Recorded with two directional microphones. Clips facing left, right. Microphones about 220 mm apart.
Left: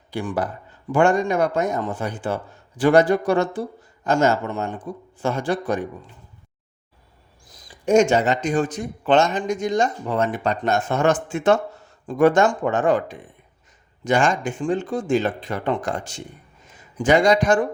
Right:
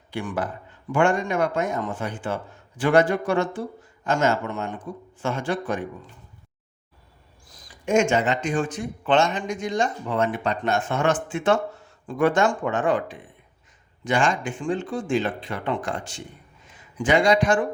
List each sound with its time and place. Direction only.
0.1 s a man's voice: 35° left (ahead or behind)
7.9 s a man's voice: 35° left (ahead or behind)